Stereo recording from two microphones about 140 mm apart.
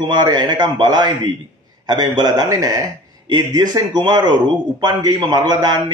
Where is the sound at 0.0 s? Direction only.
30° right (ahead or behind).